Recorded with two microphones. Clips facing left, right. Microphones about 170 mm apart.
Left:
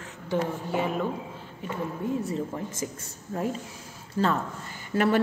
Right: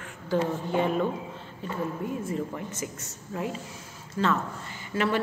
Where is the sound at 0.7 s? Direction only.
5° left (ahead or behind).